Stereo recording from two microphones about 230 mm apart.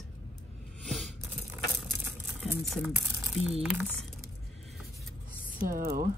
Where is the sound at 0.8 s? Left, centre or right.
Centre.